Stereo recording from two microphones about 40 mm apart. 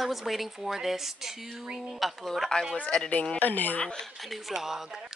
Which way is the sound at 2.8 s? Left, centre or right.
Left.